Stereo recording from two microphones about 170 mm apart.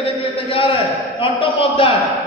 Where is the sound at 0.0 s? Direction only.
35° left (ahead or behind).